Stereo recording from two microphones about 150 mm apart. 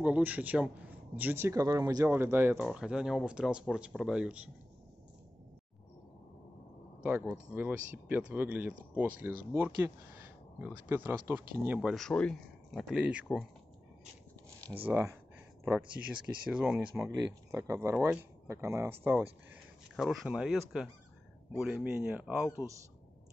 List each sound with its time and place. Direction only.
0.0 s speech: 10° right (ahead or behind)
2.6 s speech: 5° right (ahead or behind)
7.0 s speech: 10° right (ahead or behind)
11.9 s speech: 5° left (ahead or behind)
14.8 s speech: 10° right (ahead or behind)
16.9 s speech: 15° right (ahead or behind)
20.0 s speech: 5° right (ahead or behind)